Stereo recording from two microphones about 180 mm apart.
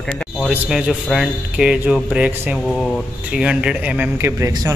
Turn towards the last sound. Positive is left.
turn(degrees=-20)  # may be behind; listen again after turning